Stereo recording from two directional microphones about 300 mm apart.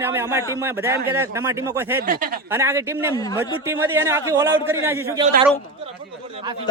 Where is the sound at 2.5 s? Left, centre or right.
Centre.